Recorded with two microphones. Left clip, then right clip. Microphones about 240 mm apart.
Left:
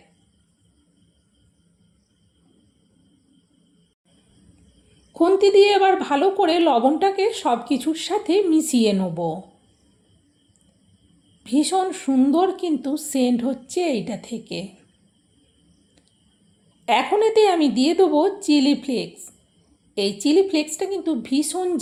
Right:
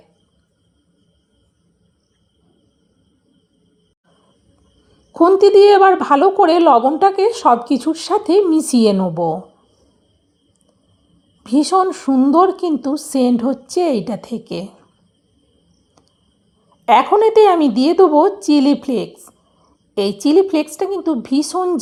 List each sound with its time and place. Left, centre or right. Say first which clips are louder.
5.1 s a woman's voice: right 6 dB; right
11.4 s a woman's voice: right 6 dB; right
17.1 s a woman's voice: right 4 dB; right